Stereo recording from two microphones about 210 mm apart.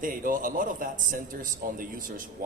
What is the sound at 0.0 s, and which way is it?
A man's voice, 40° right (ahead or behind).